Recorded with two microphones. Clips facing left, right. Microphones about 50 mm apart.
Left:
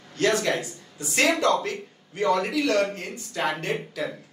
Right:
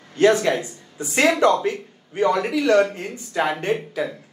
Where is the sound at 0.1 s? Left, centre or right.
Right.